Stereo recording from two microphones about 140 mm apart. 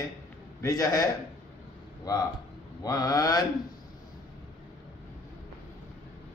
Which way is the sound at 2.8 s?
25° left (ahead or behind).